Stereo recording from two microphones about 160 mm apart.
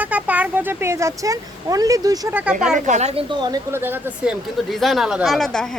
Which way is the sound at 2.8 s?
45° right (ahead or behind).